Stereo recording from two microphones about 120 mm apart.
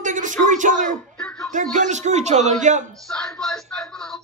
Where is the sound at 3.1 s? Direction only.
5° left (ahead or behind).